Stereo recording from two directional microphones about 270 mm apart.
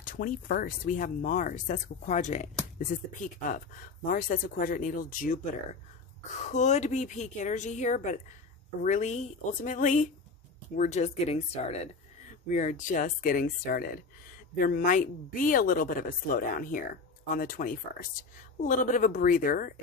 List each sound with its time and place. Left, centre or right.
0.0 s speech: left